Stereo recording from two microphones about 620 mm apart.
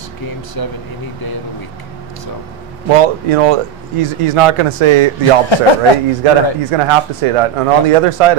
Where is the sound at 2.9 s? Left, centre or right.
Right.